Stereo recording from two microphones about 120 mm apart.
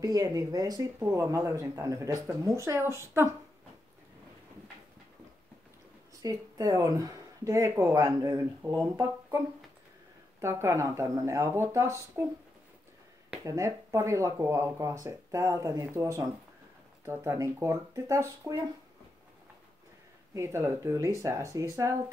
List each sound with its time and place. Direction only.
0.0 s speech: 30° right (ahead or behind)
6.2 s speech: 30° right (ahead or behind)
10.4 s speech: 25° right (ahead or behind)
13.4 s speech: 25° right (ahead or behind)
20.3 s speech: 25° right (ahead or behind)